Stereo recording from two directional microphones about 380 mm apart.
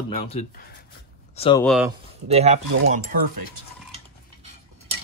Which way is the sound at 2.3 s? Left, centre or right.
Centre.